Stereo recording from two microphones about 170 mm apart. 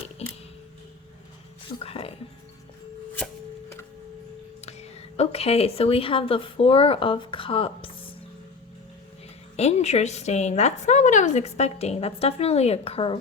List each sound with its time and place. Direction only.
0.2 s a sound: 40° left (ahead or behind)
1.8 s music: 35° left (ahead or behind)
4.6 s speech: 40° left (ahead or behind)
9.6 s a woman's voice: 40° left (ahead or behind)